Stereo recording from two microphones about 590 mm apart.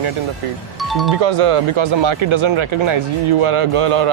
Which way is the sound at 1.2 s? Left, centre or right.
Right.